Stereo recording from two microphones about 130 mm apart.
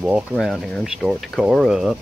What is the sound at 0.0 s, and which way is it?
Speech, 5° right (ahead or behind).